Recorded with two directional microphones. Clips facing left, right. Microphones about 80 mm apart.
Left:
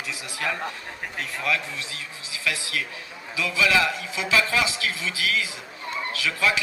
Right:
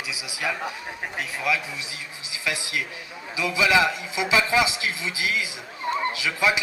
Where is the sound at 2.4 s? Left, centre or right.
Centre.